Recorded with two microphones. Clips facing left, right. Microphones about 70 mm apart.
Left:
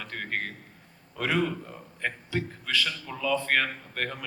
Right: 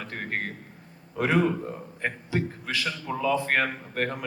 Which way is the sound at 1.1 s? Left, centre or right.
Right.